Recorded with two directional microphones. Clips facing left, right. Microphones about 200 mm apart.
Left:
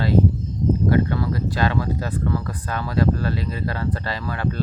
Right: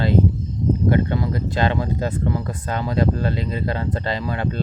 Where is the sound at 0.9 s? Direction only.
20° right (ahead or behind).